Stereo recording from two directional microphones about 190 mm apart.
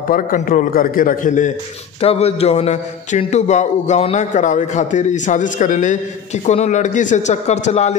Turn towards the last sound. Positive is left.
turn(degrees=35)  # may be behind; listen again after turning